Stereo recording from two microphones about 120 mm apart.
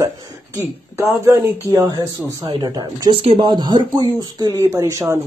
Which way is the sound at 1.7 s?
35° right (ahead or behind).